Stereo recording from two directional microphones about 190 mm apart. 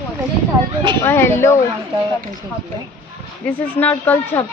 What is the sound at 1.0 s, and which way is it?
Speech, 10° left (ahead or behind).